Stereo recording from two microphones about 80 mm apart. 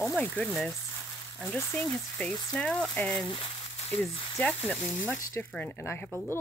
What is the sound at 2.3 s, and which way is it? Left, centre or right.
Speech, left.